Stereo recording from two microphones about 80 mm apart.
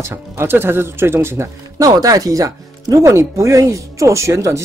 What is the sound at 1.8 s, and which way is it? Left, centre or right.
Speech, right.